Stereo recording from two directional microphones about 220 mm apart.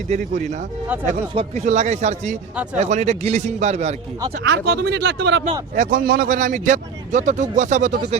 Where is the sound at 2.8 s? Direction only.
30° right (ahead or behind).